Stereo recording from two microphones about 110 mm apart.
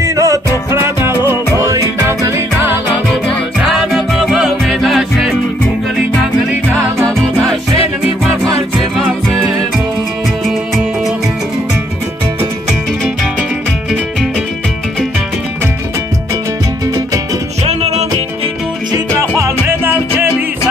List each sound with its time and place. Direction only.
0.0 s music: 30° right (ahead or behind)
3.9 s music: 5° right (ahead or behind)
6.7 s music: 20° right (ahead or behind)
10.4 s music: centre (ahead or behind)
13.0 s music: 5° right (ahead or behind)
16.8 s music: 35° right (ahead or behind)
17.6 s music: 85° right
19.1 s music: 25° right (ahead or behind)